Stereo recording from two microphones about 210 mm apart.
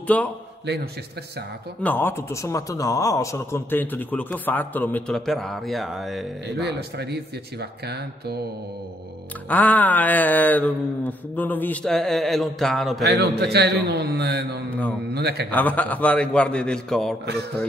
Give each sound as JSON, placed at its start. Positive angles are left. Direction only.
{"t": 0.0, "sound": "a man's voice", "side_deg": 5}
{"t": 0.7, "sound": "a man's voice", "side_deg": -50}
{"t": 1.8, "sound": "speech", "side_deg": 10}
{"t": 6.4, "sound": "a man's voice", "side_deg": -55}
{"t": 9.5, "sound": "speech", "side_deg": 10}
{"t": 13.0, "sound": "a man's voice", "side_deg": -50}
{"t": 15.5, "sound": "a man's voice", "side_deg": 10}